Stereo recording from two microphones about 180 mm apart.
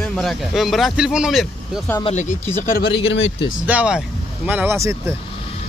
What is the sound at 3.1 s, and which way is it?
Speech, 90° left.